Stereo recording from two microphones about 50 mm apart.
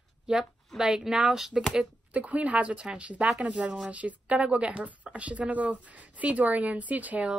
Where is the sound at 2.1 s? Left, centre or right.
Right.